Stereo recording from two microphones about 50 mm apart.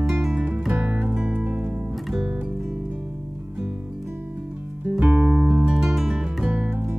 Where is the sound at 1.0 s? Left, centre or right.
Right.